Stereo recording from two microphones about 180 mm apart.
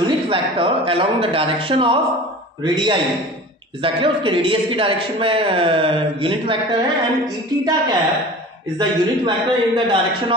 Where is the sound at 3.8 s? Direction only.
30° right (ahead or behind).